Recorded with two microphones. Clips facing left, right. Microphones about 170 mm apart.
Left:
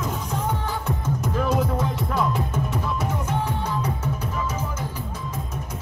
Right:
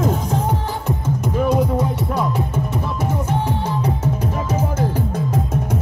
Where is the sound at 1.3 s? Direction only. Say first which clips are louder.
Right 6 dB; 15° right (ahead or behind).